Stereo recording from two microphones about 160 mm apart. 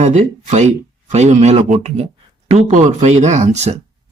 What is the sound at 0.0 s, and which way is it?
Speech, 45° right (ahead or behind).